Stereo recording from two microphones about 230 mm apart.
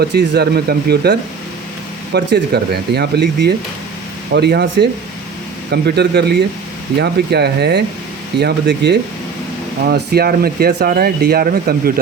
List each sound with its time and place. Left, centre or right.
0.0 s speech: right
2.1 s speech: right